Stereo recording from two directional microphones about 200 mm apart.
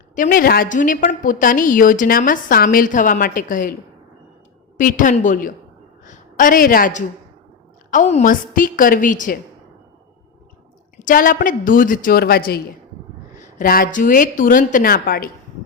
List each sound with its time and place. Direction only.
0.2 s a woman's voice: 45° left (ahead or behind)
4.8 s a woman's voice: 40° left (ahead or behind)
11.0 s a woman's voice: 45° left (ahead or behind)